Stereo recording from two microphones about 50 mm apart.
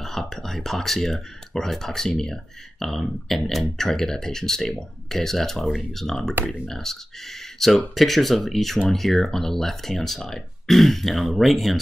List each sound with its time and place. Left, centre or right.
0.0 s speech: centre